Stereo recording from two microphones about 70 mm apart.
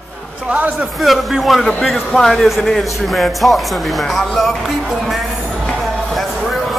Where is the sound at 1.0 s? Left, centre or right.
Centre.